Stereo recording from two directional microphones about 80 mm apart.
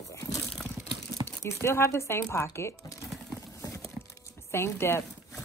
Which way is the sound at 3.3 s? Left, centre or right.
Left.